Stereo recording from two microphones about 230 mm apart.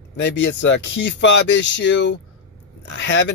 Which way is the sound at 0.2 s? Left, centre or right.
Left.